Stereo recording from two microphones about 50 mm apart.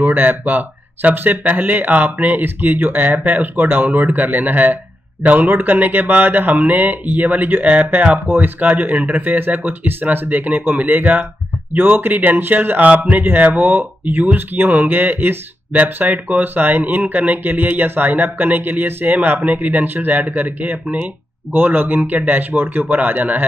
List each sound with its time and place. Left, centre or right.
0.0 s speech: right